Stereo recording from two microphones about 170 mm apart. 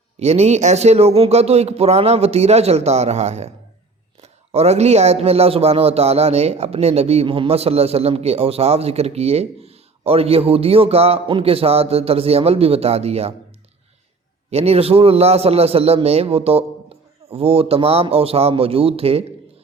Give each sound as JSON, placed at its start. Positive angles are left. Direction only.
{"t": 0.2, "sound": "speech", "side_deg": -40}
{"t": 14.5, "sound": "speech", "side_deg": -35}